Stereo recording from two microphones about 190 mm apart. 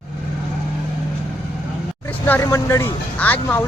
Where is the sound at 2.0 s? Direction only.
10° left (ahead or behind).